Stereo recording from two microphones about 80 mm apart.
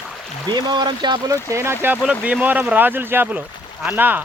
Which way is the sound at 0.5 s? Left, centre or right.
Right.